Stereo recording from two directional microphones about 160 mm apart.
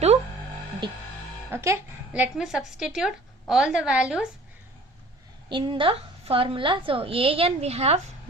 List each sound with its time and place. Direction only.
1.5 s a woman's voice: 15° right (ahead or behind)
5.5 s a woman's voice: 30° right (ahead or behind)